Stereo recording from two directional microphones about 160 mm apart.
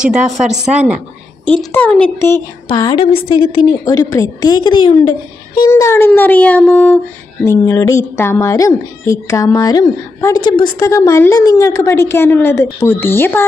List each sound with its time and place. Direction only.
0.0 s a woman's voice: 5° right (ahead or behind)
1.4 s a woman's voice: 10° left (ahead or behind)
2.7 s speech: 25° left (ahead or behind)
3.0 s speech: 35° left (ahead or behind); by 13.4 s 15° left (ahead or behind)